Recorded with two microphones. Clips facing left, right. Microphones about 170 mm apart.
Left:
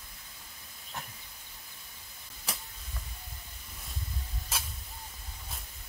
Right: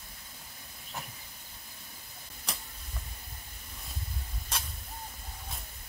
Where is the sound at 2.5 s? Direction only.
5° left (ahead or behind).